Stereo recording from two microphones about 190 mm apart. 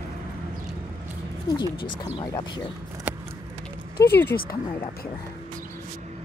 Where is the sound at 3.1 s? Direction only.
10° right (ahead or behind).